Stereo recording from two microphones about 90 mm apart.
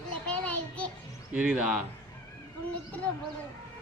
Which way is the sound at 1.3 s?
10° right (ahead or behind).